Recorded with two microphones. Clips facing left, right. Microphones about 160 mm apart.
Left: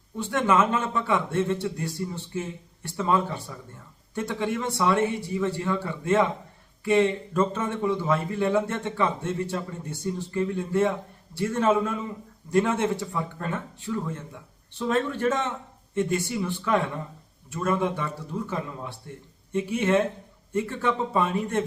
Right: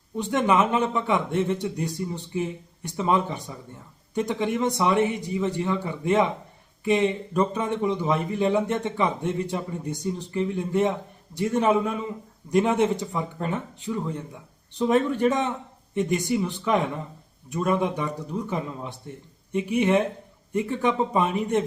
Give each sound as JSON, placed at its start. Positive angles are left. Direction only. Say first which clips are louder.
{"t": 0.2, "sound": "a man's voice", "louder": "right 1 dB", "side_deg": -15}